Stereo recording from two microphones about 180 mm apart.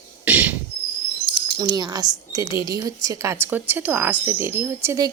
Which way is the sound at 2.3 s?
20° right (ahead or behind).